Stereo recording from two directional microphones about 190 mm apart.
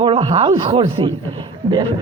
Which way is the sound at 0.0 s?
30° right (ahead or behind).